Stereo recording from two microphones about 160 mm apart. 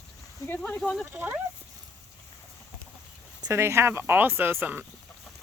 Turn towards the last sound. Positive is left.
turn(degrees=-15)  # may be behind; listen again after turning